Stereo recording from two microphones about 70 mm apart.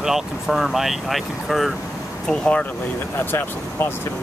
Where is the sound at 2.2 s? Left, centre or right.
Centre.